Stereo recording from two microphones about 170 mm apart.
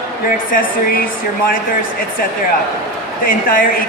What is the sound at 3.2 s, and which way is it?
Speech, 55° left (ahead or behind).